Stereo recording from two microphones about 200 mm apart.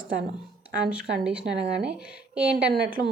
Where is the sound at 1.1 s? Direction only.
60° right (ahead or behind).